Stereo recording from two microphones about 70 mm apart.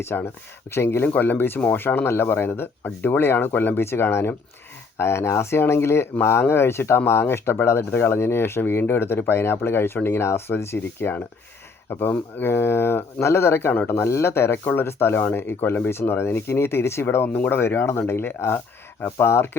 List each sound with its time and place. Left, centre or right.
0.0 s speech: left
1.0 s speech: left
17.3 s speech: left
17.6 s speech: left